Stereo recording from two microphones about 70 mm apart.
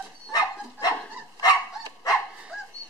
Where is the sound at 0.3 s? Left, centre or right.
Left.